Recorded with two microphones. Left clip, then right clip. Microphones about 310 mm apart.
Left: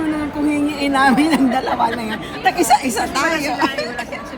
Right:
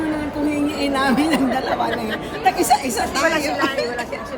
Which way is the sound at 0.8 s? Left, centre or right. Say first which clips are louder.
Left 5 dB; left.